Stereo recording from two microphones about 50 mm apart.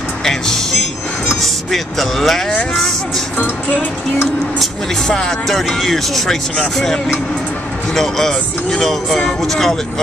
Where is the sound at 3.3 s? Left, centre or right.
Left.